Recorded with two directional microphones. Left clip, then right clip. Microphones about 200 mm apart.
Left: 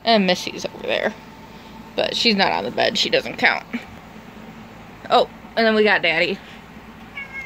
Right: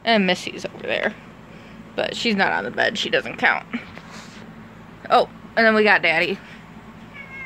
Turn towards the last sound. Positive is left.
turn(degrees=0)  # may be behind; listen again after turning